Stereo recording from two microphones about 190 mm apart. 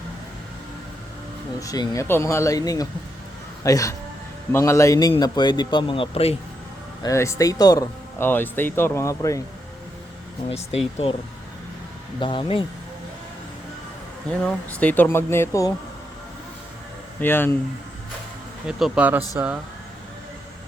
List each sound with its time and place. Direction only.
1.5 s a man's voice: 20° left (ahead or behind)
7.0 s speech: 15° left (ahead or behind)
10.5 s speech: 35° left (ahead or behind)
12.2 s a man's voice: 25° left (ahead or behind)
14.3 s speech: 5° left (ahead or behind)
17.2 s speech: 10° left (ahead or behind)
18.8 s speech: 5° right (ahead or behind)